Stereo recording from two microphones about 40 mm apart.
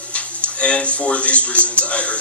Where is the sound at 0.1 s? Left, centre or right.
Left.